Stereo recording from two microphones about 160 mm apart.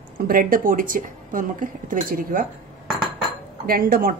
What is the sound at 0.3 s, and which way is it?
Speech, 60° right (ahead or behind).